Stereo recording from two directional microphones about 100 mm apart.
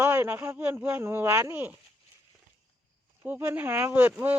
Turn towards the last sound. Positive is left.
turn(degrees=-20)  # may be behind; listen again after turning